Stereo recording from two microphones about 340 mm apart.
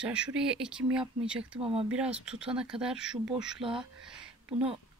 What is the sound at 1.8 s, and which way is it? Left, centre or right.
Speech, centre.